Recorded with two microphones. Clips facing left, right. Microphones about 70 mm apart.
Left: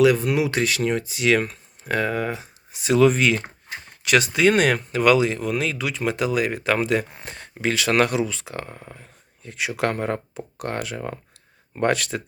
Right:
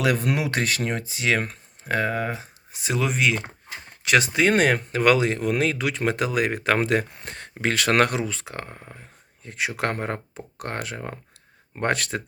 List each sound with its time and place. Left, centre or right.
0.0 s speech: right
3.0 s speech: centre
4.0 s speech: right